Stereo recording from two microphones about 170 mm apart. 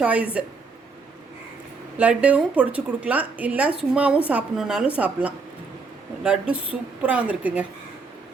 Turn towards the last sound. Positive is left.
turn(degrees=-10)  # may be behind; listen again after turning